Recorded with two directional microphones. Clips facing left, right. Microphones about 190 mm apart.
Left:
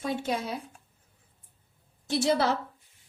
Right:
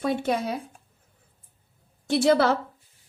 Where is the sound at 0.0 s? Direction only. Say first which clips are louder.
Right 5 dB; 60° right (ahead or behind).